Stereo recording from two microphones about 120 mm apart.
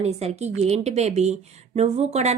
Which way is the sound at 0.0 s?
60° right (ahead or behind).